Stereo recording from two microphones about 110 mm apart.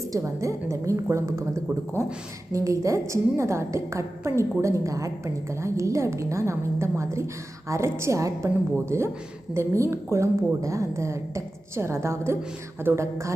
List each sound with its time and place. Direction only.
0.0 s a woman's voice: 30° right (ahead or behind)
2.5 s a woman's voice: 30° right (ahead or behind)